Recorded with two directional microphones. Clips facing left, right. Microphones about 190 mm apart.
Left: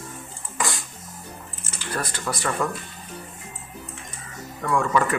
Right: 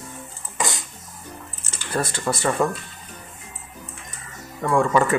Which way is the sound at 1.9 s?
25° right (ahead or behind).